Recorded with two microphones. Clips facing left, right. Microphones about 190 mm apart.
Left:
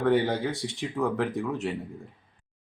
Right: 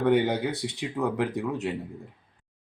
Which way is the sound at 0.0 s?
20° right (ahead or behind).